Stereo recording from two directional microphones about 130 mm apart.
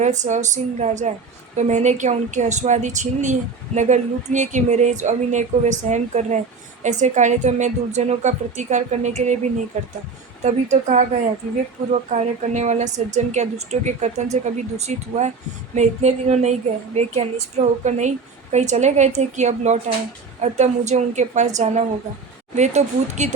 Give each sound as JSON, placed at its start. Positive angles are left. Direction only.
{"t": 0.0, "sound": "a woman's voice", "side_deg": -65}
{"t": 10.4, "sound": "a woman's voice", "side_deg": -65}